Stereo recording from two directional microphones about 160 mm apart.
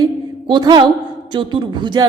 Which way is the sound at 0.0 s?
25° right (ahead or behind).